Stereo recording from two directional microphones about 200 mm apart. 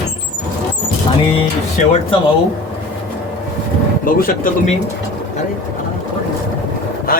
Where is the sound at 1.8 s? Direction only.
40° left (ahead or behind).